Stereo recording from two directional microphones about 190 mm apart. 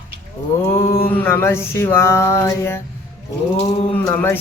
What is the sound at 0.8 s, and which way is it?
Mantra, 50° left (ahead or behind).